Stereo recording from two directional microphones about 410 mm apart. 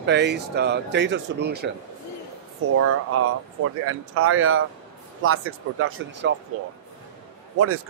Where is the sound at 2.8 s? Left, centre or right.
Right.